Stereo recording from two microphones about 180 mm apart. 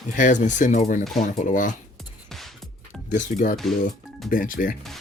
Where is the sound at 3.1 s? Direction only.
45° left (ahead or behind).